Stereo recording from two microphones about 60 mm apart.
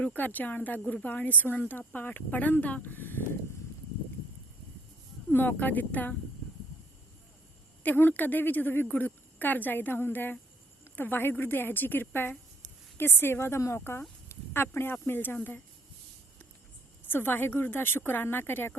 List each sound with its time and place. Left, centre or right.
0.0 s a woman's voice: left
5.3 s speech: left
7.9 s a woman's voice: left
14.3 s a sound: left
15.0 s a woman's voice: left
17.1 s a woman's voice: left